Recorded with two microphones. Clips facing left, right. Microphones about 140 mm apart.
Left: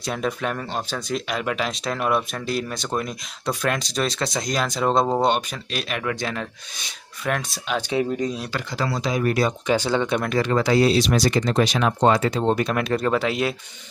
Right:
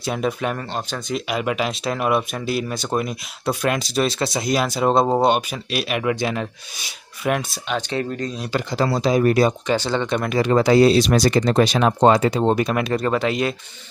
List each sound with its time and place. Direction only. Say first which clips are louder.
0.0 s speech: right 3 dB; 5° right (ahead or behind)
7.7 s speech: left 1 dB; 10° left (ahead or behind)
8.5 s speech: right 5 dB; 25° right (ahead or behind)
9.7 s speech: even; 5° left (ahead or behind)
10.4 s speech: right 6 dB; 20° right (ahead or behind)
12.1 s speech: right 3 dB; 15° right (ahead or behind); by 13.6 s 5° left (ahead or behind)